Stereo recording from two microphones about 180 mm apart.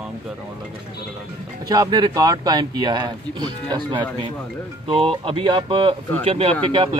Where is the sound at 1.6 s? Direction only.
20° right (ahead or behind).